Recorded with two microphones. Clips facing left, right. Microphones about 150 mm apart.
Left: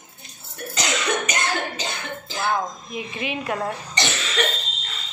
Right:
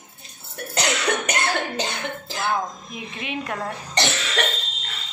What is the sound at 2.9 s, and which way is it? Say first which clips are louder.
Speech: left 3 dB; centre (ahead or behind).